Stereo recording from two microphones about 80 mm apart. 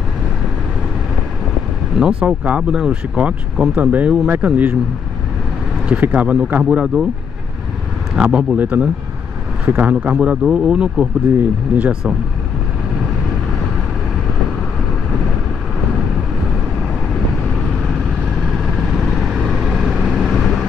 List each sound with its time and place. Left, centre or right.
2.0 s speech: centre
5.9 s speech: right
8.2 s speech: centre
18.8 s vehicle: centre